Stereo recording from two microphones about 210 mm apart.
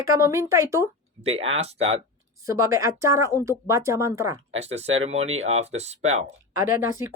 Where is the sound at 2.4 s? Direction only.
15° right (ahead or behind).